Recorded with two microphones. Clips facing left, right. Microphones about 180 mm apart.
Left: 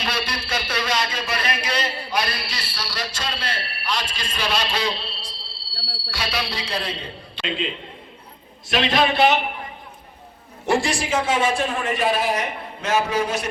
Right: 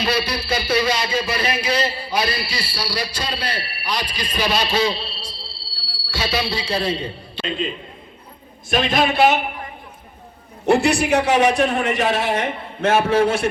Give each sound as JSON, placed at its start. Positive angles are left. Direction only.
{"t": 0.0, "sound": "a man's voice", "side_deg": -10}
{"t": 7.4, "sound": "a man's voice", "side_deg": -45}
{"t": 8.7, "sound": "a man's voice", "side_deg": -50}
{"t": 10.7, "sound": "a man's voice", "side_deg": -65}
{"t": 12.5, "sound": "a man's voice", "side_deg": -55}